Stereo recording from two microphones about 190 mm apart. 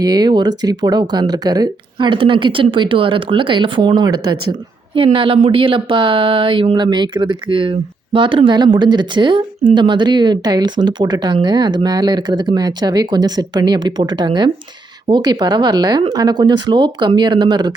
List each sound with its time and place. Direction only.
0.0 s speech: 20° right (ahead or behind)